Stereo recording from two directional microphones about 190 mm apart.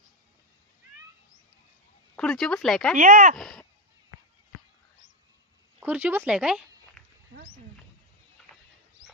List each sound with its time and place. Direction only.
2.1 s speech: 5° left (ahead or behind)
2.9 s speech: 45° right (ahead or behind)
3.3 s speech: centre (ahead or behind)
5.8 s speech: 10° right (ahead or behind)